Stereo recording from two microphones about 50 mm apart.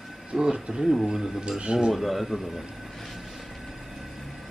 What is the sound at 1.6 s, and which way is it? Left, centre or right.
Speech, centre.